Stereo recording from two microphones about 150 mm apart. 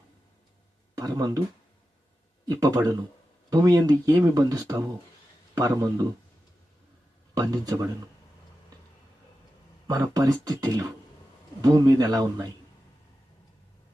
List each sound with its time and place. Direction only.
0.9 s speech: 25° right (ahead or behind)
2.5 s speech: 25° right (ahead or behind)
7.3 s speech: 25° right (ahead or behind)
10.2 s speech: 25° right (ahead or behind)